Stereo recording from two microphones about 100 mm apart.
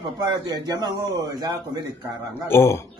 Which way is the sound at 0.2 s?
45° right (ahead or behind).